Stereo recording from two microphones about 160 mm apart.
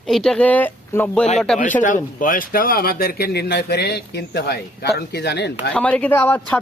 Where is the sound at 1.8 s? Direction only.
55° left (ahead or behind); by 5.5 s 90° left.